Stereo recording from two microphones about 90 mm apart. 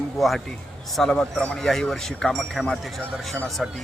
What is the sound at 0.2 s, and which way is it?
A man's voice, centre (ahead or behind).